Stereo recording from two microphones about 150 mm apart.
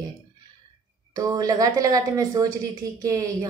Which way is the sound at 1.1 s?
25° right (ahead or behind).